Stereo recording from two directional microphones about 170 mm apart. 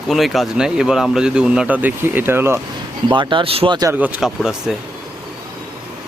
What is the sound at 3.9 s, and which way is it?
Speech, 10° right (ahead or behind).